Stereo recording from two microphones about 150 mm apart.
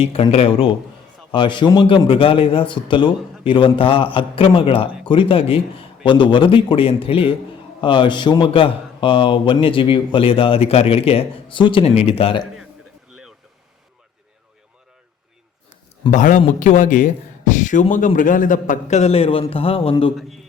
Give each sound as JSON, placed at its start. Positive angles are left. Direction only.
{"t": 0.0, "sound": "speech", "side_deg": 40}
{"t": 16.1, "sound": "speech", "side_deg": 55}